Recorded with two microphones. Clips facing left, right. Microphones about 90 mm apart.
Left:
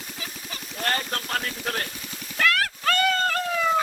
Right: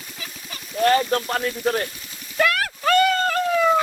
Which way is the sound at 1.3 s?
5° right (ahead or behind).